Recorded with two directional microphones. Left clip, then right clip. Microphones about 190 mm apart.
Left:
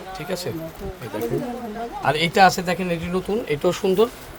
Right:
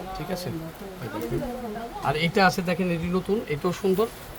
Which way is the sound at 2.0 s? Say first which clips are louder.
Left 6 dB; 65° left (ahead or behind).